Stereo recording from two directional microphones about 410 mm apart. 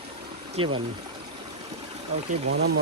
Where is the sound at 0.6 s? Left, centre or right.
Centre.